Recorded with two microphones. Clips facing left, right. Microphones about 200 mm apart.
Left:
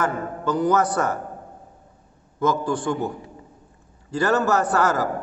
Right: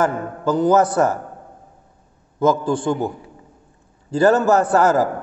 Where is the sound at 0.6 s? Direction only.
25° right (ahead or behind).